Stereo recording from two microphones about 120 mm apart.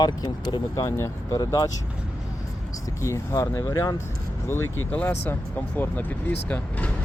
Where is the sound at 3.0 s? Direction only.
25° left (ahead or behind).